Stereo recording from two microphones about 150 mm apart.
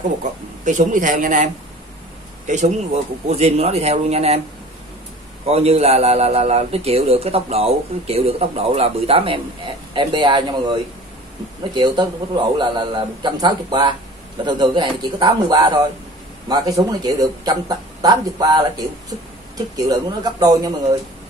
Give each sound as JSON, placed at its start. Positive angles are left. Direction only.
{"t": 0.2, "sound": "speech", "side_deg": -55}
{"t": 5.5, "sound": "a man's voice", "side_deg": -45}
{"t": 16.4, "sound": "speech", "side_deg": -25}